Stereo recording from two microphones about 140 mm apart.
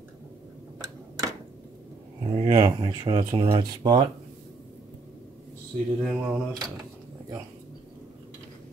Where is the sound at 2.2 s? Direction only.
45° right (ahead or behind).